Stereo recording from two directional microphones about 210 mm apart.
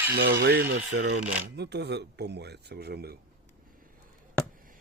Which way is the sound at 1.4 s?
55° right (ahead or behind).